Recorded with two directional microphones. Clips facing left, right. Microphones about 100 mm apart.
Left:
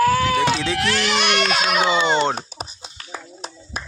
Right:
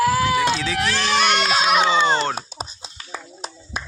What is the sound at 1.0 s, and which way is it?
Speech, 30° right (ahead or behind).